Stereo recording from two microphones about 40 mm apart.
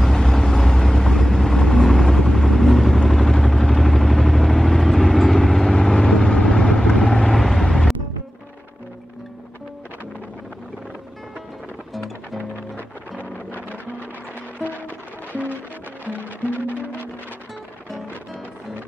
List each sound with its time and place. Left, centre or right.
0.0 s vehicle: centre
7.3 s vehicle: centre
7.6 s music: centre
13.6 s music: right